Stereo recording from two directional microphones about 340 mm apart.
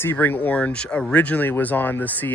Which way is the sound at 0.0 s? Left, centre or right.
Centre.